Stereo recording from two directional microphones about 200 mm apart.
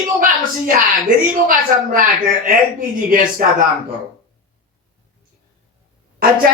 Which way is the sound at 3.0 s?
45° right (ahead or behind).